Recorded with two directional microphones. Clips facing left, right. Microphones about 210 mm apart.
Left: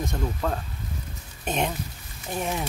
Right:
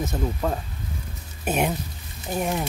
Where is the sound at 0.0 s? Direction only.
5° right (ahead or behind).